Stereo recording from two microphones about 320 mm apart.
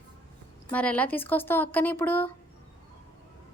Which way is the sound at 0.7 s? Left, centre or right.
Centre.